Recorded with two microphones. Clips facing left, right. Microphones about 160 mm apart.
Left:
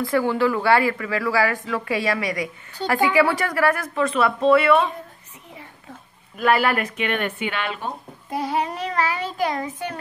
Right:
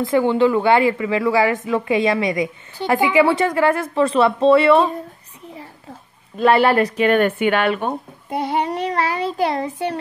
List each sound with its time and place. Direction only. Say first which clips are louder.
0.0 s speech: right 4 dB; 20° right (ahead or behind)
6.3 s child singing: right 5 dB; 30° right (ahead or behind)
7.2 s speech: right 9 dB; 55° right (ahead or behind)
8.3 s child singing: right 3 dB; 30° right (ahead or behind)